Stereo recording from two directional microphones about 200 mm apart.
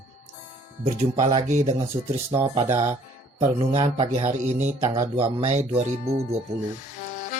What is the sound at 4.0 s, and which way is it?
Music, 30° right (ahead or behind).